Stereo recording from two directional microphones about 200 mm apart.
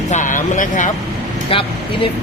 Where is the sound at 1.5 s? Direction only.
25° left (ahead or behind).